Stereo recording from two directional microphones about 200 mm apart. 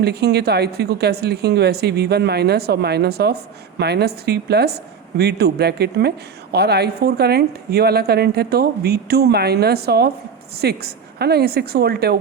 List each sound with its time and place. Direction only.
0.0 s a woman's voice: 55° right (ahead or behind)